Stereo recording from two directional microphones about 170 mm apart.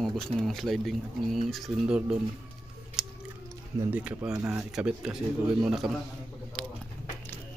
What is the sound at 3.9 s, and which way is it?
Speech, 10° right (ahead or behind).